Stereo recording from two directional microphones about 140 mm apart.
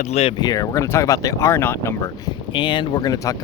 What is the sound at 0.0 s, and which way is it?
Speech, 50° left (ahead or behind).